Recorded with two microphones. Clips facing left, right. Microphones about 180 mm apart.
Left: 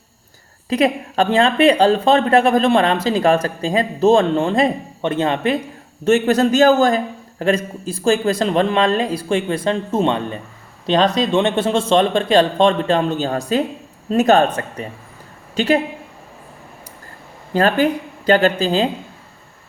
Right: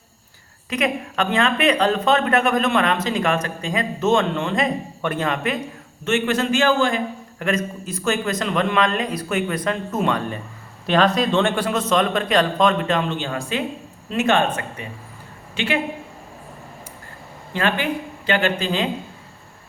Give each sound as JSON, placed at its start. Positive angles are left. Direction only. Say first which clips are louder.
{"t": 0.7, "sound": "a man's voice", "louder": "left 6 dB", "side_deg": 35}
{"t": 17.5, "sound": "speech", "louder": "left 7 dB", "side_deg": 40}